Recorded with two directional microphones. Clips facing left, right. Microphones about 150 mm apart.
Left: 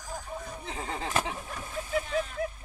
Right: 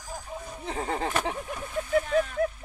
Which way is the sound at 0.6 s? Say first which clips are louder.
Right 8 dB; 50° right (ahead or behind).